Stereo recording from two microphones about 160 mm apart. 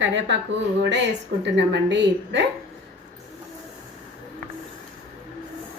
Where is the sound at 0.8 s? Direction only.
90° right.